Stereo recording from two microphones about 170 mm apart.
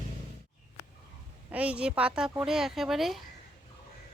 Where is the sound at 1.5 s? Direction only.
10° right (ahead or behind).